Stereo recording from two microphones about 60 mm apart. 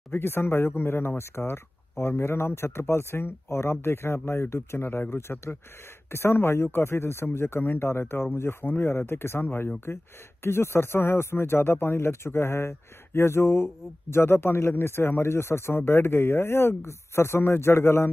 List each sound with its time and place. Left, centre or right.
0.1 s speech: left